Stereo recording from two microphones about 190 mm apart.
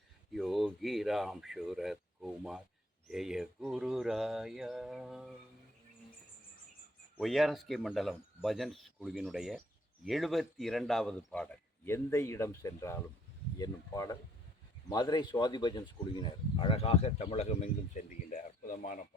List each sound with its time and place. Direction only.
0.3 s speech: centre (ahead or behind)
7.2 s speech: centre (ahead or behind); by 18.9 s 45° left (ahead or behind)